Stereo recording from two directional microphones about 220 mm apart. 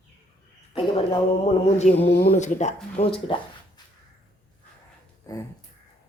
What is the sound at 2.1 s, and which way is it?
Speech, 50° left (ahead or behind).